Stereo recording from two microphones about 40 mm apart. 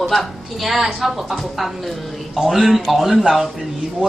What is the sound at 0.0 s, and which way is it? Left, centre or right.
A woman's voice, centre.